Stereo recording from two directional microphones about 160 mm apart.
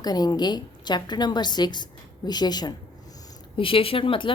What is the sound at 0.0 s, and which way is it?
A woman's voice, 25° left (ahead or behind).